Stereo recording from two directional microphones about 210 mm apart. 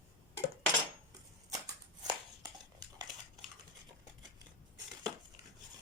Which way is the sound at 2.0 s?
20° right (ahead or behind).